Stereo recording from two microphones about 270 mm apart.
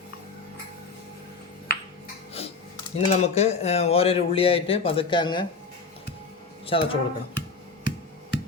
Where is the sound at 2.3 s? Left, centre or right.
Left.